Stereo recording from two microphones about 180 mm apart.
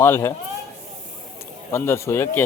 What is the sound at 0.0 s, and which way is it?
Speech, 15° left (ahead or behind).